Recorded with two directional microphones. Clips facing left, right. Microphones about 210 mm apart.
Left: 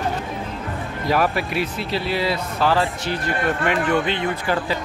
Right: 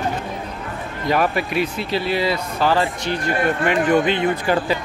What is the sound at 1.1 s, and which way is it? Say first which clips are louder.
Speech: right 1 dB; centre (ahead or behind).